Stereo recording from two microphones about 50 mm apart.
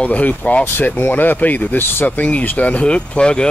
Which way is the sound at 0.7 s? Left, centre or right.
Left.